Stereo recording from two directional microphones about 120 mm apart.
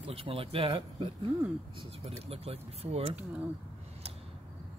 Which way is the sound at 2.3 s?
55° right (ahead or behind).